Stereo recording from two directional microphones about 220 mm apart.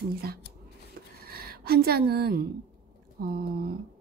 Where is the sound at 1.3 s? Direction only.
45° right (ahead or behind).